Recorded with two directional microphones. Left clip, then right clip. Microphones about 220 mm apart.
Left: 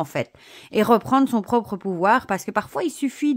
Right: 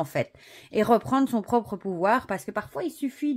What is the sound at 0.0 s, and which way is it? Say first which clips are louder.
Speech: left 2 dB; 20° left (ahead or behind).